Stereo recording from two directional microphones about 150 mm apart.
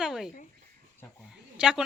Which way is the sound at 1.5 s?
5° right (ahead or behind).